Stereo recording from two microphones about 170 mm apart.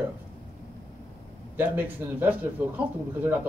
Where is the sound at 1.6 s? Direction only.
10° right (ahead or behind).